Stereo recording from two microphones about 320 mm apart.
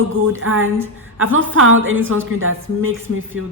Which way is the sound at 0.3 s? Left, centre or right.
Right.